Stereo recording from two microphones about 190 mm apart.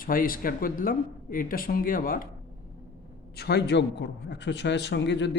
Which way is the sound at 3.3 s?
60° left (ahead or behind).